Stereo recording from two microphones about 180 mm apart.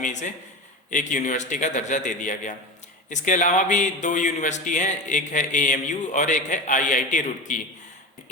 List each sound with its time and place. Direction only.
0.0 s speech: 40° left (ahead or behind)